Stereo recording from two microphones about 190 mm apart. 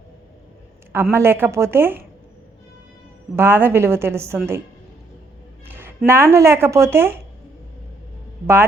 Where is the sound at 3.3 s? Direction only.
10° right (ahead or behind).